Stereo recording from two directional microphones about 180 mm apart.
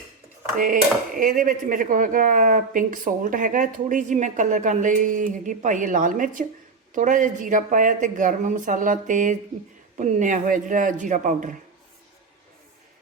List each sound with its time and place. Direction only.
0.5 s speech: 50° right (ahead or behind)